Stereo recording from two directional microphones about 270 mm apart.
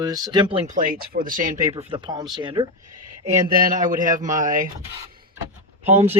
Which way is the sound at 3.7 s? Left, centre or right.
Right.